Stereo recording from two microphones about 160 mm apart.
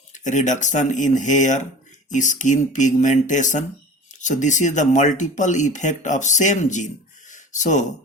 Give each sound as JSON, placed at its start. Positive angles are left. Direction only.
{"t": 0.1, "sound": "speech", "side_deg": 50}